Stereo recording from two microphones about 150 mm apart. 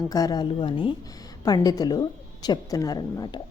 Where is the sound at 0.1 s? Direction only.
25° left (ahead or behind).